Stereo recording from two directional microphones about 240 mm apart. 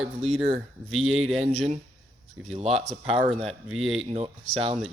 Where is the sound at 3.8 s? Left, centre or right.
Right.